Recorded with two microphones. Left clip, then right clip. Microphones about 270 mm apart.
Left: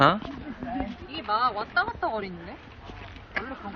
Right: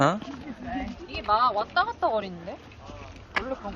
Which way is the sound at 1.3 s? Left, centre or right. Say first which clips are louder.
Right 3 dB; right.